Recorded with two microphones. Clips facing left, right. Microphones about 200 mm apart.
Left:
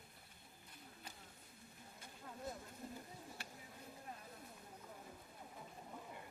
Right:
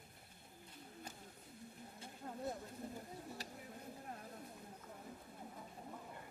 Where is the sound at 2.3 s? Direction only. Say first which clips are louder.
Right 5 dB; 40° right (ahead or behind).